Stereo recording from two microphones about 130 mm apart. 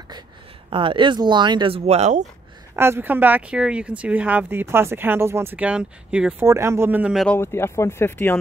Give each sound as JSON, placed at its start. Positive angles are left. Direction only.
{"t": 0.7, "sound": "speech", "side_deg": -40}
{"t": 1.9, "sound": "speech", "side_deg": -60}
{"t": 2.7, "sound": "speech", "side_deg": -20}
{"t": 6.4, "sound": "speech", "side_deg": -25}
{"t": 7.2, "sound": "speech", "side_deg": 15}